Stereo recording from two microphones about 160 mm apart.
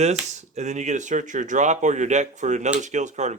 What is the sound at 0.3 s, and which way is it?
Speech, 45° right (ahead or behind).